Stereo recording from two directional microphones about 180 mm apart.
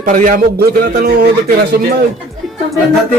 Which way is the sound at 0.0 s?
50° right (ahead or behind).